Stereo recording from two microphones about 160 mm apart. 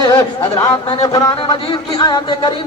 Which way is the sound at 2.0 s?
25° left (ahead or behind).